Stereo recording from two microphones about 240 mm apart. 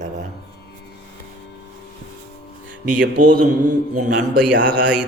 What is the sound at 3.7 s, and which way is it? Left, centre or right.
Mantra, right.